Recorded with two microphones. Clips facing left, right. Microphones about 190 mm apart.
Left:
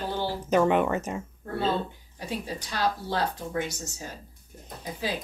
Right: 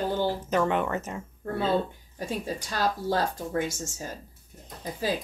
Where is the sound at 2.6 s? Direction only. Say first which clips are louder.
Even; 45° right (ahead or behind).